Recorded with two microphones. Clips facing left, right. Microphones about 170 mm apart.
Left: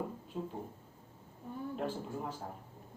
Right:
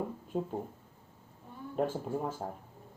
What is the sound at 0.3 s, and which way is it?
Speech, 60° right (ahead or behind).